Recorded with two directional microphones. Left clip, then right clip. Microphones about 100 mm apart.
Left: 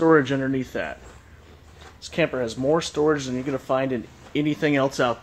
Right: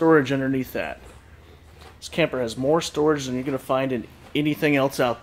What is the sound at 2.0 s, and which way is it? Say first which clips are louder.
Speech: even; 20° right (ahead or behind).